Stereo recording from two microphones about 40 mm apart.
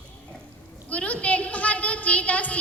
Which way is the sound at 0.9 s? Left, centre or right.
Left.